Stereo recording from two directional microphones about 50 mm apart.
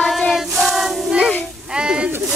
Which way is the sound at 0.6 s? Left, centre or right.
Centre.